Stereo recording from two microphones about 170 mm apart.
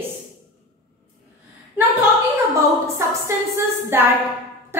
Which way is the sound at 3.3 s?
15° right (ahead or behind).